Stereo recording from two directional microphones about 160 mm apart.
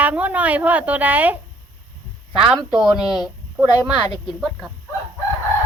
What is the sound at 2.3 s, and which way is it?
Speech, 35° right (ahead or behind).